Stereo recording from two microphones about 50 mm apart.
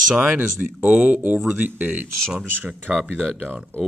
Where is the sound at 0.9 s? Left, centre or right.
Right.